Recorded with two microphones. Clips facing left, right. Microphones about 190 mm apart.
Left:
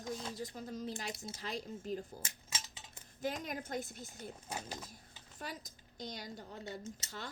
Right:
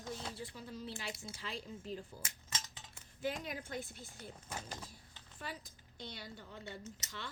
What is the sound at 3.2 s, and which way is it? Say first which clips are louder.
A woman's voice: left 1 dB; 40° left (ahead or behind).